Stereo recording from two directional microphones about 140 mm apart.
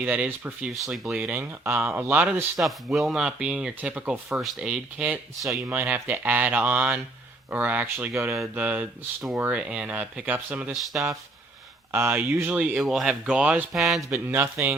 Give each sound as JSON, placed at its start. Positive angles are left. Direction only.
{"t": 0.0, "sound": "speech", "side_deg": -10}
{"t": 0.7, "sound": "speech", "side_deg": 0}
{"t": 1.1, "sound": "speech", "side_deg": -10}
{"t": 2.6, "sound": "speech", "side_deg": 0}
{"t": 14.1, "sound": "speech", "side_deg": -15}